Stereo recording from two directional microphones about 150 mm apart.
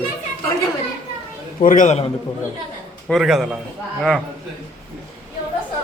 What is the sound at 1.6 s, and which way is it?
Speech, 60° left (ahead or behind).